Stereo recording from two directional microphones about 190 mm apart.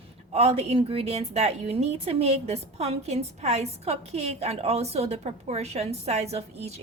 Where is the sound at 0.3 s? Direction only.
35° right (ahead or behind).